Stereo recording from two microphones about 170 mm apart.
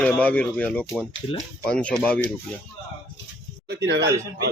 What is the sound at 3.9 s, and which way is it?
Speech, 80° right.